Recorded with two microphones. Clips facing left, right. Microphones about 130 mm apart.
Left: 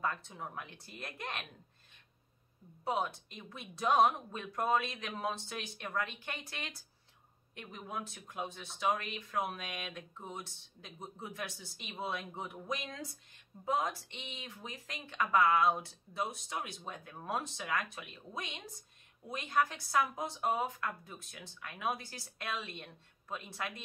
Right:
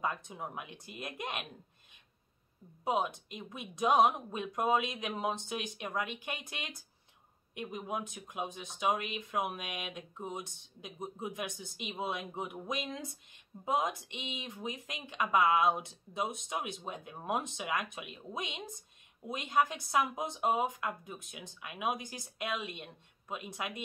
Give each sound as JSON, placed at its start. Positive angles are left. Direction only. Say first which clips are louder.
{"t": 0.0, "sound": "speech", "louder": "right 1 dB", "side_deg": -15}
{"t": 2.8, "sound": "speech", "louder": "right 3 dB", "side_deg": -20}